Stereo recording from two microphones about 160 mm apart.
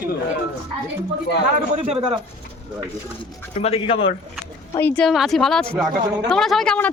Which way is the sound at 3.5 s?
40° left (ahead or behind).